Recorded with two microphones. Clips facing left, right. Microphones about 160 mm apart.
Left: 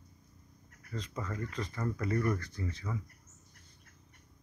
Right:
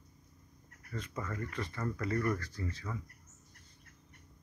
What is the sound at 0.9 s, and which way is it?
Speech, 20° left (ahead or behind).